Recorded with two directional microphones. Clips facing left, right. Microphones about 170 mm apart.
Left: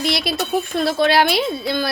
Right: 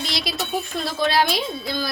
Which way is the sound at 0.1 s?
60° left (ahead or behind).